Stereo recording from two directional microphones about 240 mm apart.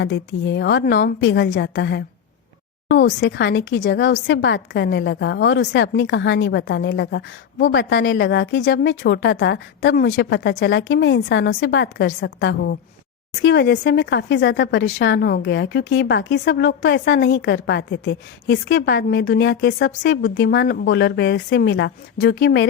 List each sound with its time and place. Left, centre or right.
0.0 s speech: left
3.2 s speech: left